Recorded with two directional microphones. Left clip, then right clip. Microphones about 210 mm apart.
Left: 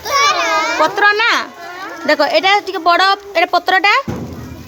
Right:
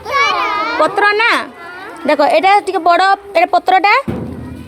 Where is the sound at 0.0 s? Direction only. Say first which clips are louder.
Even; 55° left (ahead or behind).